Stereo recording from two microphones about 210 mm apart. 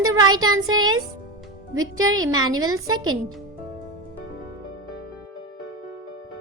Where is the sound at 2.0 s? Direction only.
75° right (ahead or behind).